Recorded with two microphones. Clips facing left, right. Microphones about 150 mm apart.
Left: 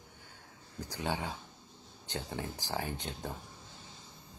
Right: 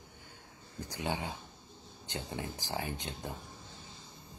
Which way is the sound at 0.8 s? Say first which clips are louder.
Even; 15° right (ahead or behind).